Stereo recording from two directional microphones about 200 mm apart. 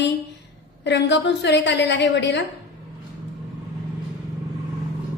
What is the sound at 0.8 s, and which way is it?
A woman's voice, 60° left (ahead or behind).